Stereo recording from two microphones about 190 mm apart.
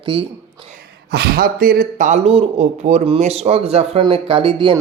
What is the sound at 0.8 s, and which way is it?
Speech, 55° right (ahead or behind).